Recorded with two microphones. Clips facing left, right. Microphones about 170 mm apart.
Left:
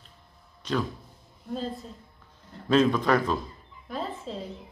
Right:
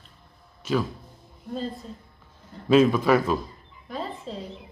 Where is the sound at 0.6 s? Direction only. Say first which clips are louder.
Right 3 dB; 5° right (ahead or behind).